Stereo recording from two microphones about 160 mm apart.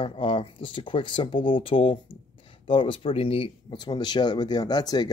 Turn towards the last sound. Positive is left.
turn(degrees=25)  # may be behind; listen again after turning